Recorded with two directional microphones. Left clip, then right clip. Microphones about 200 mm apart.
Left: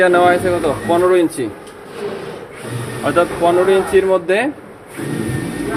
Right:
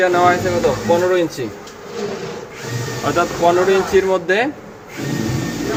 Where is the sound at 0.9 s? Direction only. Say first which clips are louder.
Left 3 dB; 20° left (ahead or behind).